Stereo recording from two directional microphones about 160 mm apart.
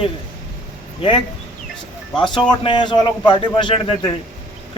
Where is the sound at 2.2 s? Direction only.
30° left (ahead or behind).